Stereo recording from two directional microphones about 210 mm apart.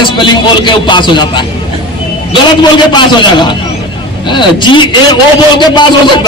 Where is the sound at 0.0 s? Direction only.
20° left (ahead or behind).